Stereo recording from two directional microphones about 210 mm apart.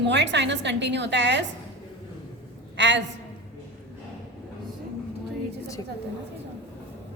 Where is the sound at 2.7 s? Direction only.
55° right (ahead or behind).